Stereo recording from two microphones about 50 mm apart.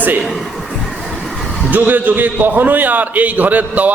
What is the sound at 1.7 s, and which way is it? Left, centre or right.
A man's voice, right.